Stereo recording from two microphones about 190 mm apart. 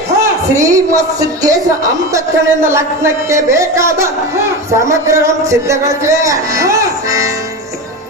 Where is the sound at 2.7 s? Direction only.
15° right (ahead or behind).